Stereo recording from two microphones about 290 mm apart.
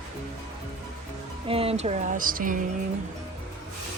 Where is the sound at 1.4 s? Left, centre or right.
Centre.